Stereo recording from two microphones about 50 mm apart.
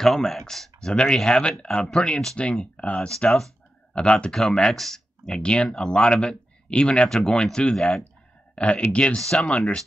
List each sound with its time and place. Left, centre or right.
0.0 s speech: centre
0.7 s speech: centre
3.1 s speech: centre
8.5 s speech: left